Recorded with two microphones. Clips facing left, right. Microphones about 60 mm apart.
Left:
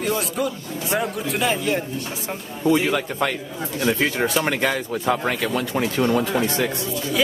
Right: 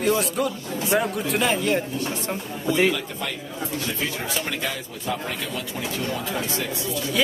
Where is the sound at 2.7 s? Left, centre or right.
Left.